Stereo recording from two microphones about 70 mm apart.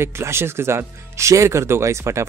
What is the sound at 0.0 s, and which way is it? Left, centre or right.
Speech, right.